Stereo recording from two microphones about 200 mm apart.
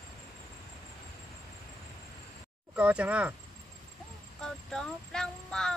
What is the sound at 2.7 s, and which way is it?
Speech, 5° right (ahead or behind).